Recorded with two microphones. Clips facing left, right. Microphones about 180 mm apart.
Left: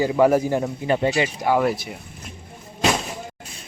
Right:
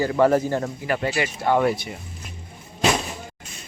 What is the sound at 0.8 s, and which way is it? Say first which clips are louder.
Speech: left 5 dB; 20° left (ahead or behind).